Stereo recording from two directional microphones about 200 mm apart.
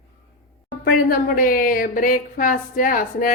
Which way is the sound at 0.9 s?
45° left (ahead or behind).